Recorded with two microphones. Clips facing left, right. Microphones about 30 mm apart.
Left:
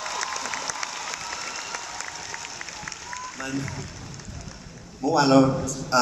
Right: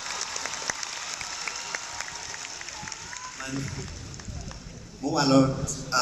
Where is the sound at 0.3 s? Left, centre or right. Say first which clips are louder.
Left 3 dB; centre.